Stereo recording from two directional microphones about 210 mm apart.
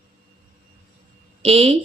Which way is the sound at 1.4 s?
30° right (ahead or behind).